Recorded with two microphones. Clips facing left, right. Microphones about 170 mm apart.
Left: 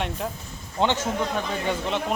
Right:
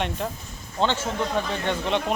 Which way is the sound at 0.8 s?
15° left (ahead or behind).